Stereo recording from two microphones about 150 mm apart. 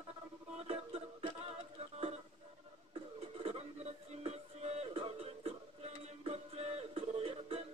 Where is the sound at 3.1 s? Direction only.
45° right (ahead or behind).